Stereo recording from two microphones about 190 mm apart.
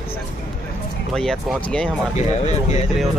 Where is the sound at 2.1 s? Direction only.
35° left (ahead or behind).